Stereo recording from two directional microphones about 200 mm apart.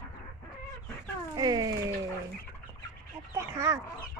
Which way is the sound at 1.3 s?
20° right (ahead or behind).